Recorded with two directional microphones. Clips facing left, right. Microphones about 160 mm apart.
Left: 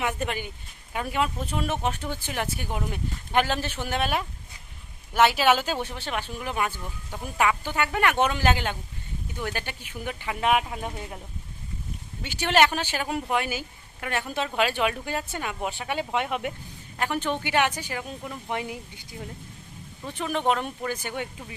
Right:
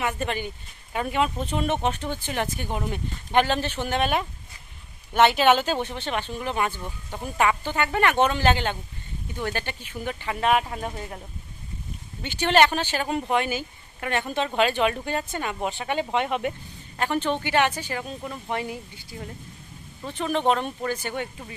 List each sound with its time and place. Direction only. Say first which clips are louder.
0.0 s speech: right 1 dB; 10° left (ahead or behind)
6.7 s speech: right 2 dB; 15° right (ahead or behind)
7.3 s speech: right 1 dB; 10° left (ahead or behind)
12.2 s speech: right 2 dB; 10° left (ahead or behind)
20.5 s speech: right 2 dB; 10° left (ahead or behind)